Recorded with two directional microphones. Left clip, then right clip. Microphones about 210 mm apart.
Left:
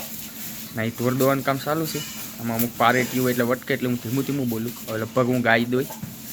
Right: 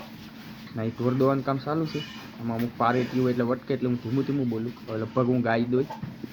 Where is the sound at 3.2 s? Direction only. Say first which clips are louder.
Left 4 dB; 25° left (ahead or behind); by 5.7 s 5° left (ahead or behind).